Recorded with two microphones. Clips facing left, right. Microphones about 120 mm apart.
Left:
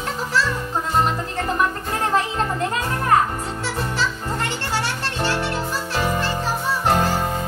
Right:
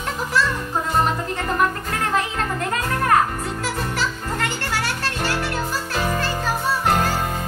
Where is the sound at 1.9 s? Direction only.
25° left (ahead or behind).